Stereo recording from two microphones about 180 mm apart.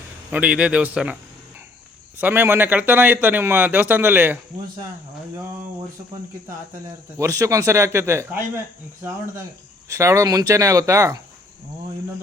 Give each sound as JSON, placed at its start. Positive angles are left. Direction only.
{"t": 0.3, "sound": "a man's voice", "side_deg": -5}
{"t": 2.1, "sound": "a man's voice", "side_deg": -10}
{"t": 7.2, "sound": "a man's voice", "side_deg": -15}